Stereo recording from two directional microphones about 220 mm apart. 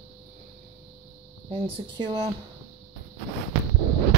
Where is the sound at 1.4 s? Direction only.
20° right (ahead or behind).